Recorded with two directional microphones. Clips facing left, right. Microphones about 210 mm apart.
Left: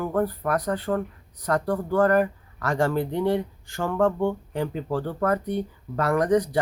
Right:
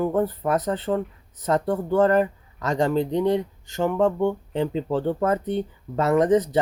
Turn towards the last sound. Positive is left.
turn(degrees=-25)  # may be behind; listen again after turning